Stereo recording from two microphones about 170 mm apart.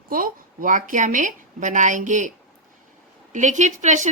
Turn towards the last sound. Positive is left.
turn(degrees=-45)  # may be behind; listen again after turning